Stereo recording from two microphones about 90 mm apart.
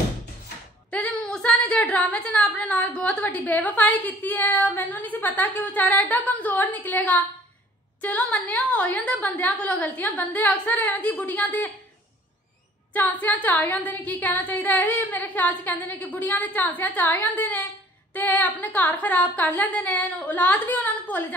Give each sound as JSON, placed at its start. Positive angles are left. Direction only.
{"t": 0.8, "sound": "a woman's voice", "side_deg": 10}
{"t": 12.9, "sound": "a woman's voice", "side_deg": 20}